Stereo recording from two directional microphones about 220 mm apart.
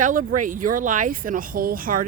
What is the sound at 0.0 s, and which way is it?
Speech, 40° right (ahead or behind).